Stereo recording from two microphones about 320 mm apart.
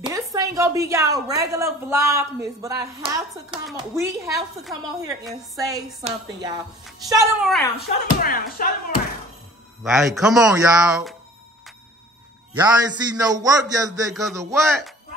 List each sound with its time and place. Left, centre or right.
0.0 s a woman's voice: centre
5.7 s a woman's voice: centre
7.7 s speech: left
9.8 s a woman's voice: centre
12.5 s a woman's voice: centre